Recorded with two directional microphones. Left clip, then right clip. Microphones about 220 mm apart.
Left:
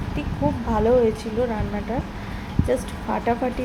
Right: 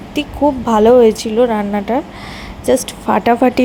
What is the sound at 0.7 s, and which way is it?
A woman's voice, 45° right (ahead or behind).